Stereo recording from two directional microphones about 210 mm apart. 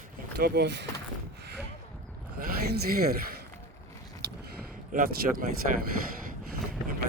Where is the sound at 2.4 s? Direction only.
45° right (ahead or behind).